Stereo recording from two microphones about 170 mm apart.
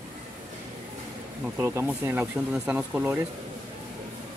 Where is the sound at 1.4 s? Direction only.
15° right (ahead or behind).